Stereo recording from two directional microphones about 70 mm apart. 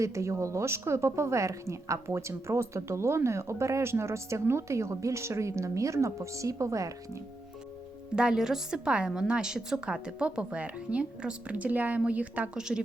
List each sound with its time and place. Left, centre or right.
0.0 s a woman's voice: right
8.1 s a woman's voice: centre